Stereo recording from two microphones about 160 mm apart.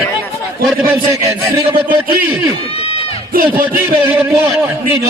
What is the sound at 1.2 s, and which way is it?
Speech, 15° right (ahead or behind).